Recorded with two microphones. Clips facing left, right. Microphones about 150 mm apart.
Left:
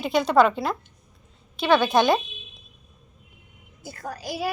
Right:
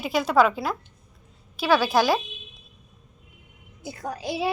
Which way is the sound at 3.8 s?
20° right (ahead or behind).